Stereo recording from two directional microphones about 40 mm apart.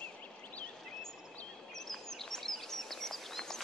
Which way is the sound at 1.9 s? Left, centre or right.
Centre.